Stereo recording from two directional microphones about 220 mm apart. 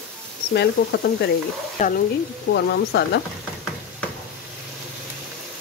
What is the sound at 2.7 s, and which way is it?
Speech, 50° left (ahead or behind).